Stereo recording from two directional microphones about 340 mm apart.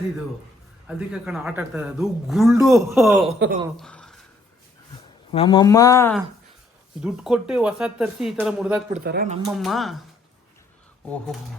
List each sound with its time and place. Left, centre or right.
0.9 s speech: centre
3.3 s speech: right
3.8 s a sound: centre
5.3 s speech: centre
9.0 s speech: right
9.6 s speech: centre